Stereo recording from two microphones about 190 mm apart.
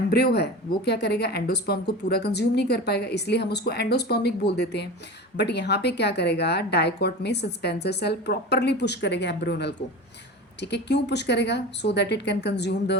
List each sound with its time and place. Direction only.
0.1 s a woman's voice: 60° left (ahead or behind)